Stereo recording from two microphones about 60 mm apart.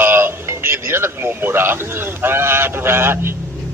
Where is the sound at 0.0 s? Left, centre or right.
Right.